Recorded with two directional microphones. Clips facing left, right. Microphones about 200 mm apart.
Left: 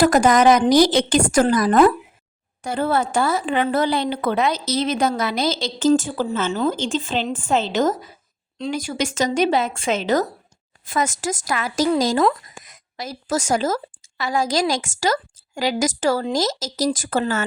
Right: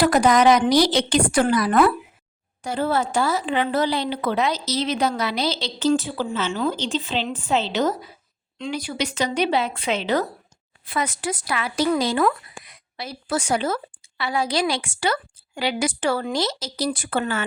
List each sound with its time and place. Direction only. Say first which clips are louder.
0.0 s a woman's voice: left 2 dB; 45° left (ahead or behind)